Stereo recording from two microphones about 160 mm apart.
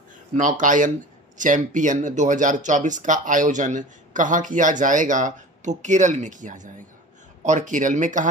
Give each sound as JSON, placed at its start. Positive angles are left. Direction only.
{"t": 0.4, "sound": "speech", "side_deg": -55}